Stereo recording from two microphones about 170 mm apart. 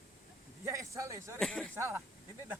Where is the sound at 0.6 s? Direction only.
20° right (ahead or behind).